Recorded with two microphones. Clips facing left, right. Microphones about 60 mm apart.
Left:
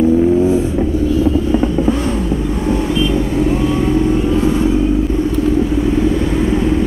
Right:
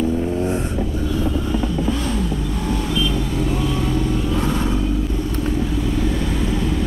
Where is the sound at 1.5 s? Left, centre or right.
Left.